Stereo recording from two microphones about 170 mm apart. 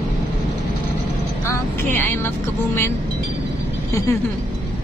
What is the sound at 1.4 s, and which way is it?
Speech, 15° left (ahead or behind).